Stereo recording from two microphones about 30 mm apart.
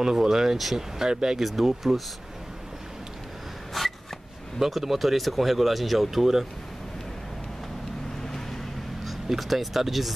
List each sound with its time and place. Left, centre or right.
0.0 s speech: centre
1.4 s speech: centre
3.8 s a sound: centre
4.6 s speech: centre
8.2 s vehicle: centre
9.0 s speech: centre